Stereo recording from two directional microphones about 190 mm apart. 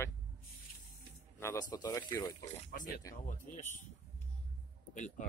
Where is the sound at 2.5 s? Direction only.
45° left (ahead or behind).